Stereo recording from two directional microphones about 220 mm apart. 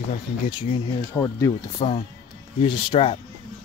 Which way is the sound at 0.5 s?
20° left (ahead or behind).